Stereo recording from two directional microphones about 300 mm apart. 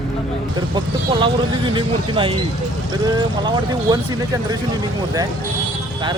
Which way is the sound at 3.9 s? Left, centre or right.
Centre.